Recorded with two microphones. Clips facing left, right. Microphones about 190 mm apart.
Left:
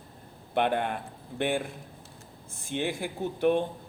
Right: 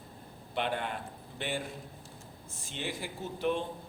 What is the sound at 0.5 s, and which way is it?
Speech, 55° left (ahead or behind).